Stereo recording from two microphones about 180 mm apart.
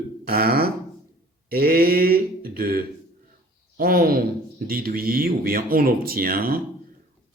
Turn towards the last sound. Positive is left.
turn(degrees=-55)  # may be behind; listen again after turning